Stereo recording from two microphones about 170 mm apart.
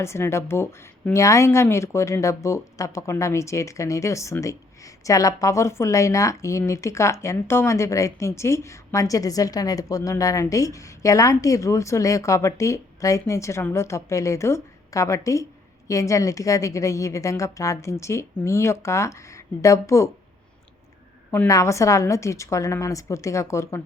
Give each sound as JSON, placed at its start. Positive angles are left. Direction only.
{"t": 0.0, "sound": "a woman's voice", "side_deg": 15}
{"t": 21.2, "sound": "speech", "side_deg": 15}